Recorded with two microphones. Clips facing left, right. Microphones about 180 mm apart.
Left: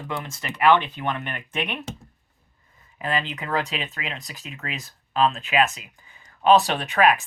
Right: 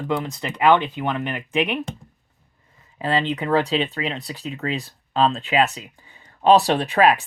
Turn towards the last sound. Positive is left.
turn(degrees=-30)  # may be behind; listen again after turning